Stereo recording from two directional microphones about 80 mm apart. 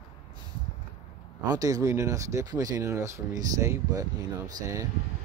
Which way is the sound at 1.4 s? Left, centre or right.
Right.